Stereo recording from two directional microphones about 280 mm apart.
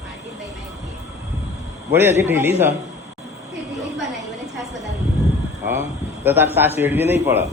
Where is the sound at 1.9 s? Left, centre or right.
Centre.